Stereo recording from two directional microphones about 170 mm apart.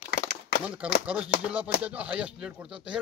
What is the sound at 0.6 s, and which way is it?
Speech, 5° right (ahead or behind).